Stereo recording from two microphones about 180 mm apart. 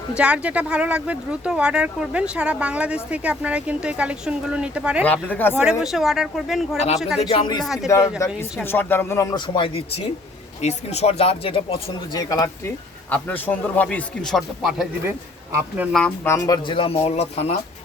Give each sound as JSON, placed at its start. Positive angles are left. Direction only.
{"t": 0.2, "sound": "speech", "side_deg": -5}
{"t": 5.0, "sound": "speech", "side_deg": 10}
{"t": 5.8, "sound": "speech", "side_deg": 0}
{"t": 6.7, "sound": "speech", "side_deg": 35}
{"t": 7.6, "sound": "speech", "side_deg": 0}
{"t": 8.2, "sound": "speech", "side_deg": 15}
{"t": 13.1, "sound": "speech", "side_deg": 10}